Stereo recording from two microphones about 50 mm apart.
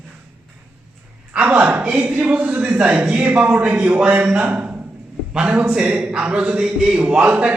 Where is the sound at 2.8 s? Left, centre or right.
Right.